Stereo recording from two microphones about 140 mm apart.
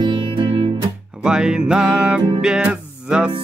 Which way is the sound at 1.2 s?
5° right (ahead or behind).